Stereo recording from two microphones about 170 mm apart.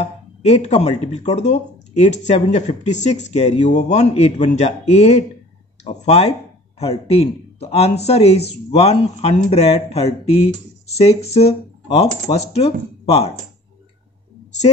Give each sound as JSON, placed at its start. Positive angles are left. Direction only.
{"t": 0.4, "sound": "speech", "side_deg": 40}